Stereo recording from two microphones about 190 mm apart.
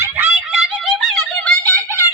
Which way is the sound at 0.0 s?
5° right (ahead or behind).